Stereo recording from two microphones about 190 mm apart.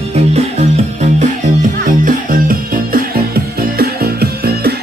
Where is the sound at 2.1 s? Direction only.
45° right (ahead or behind).